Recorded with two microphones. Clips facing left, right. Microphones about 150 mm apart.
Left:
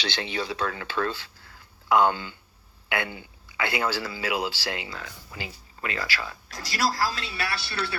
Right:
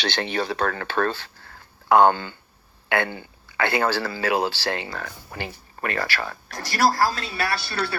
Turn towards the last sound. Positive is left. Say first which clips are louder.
# right 5 dB
turn(degrees=-45)  # may be behind; listen again after turning